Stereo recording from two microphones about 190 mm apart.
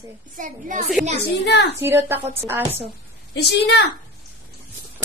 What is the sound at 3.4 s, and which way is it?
Speech, 65° left (ahead or behind).